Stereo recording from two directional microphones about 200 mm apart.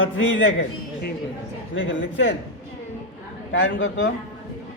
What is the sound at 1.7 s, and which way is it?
Speech, 75° left (ahead or behind).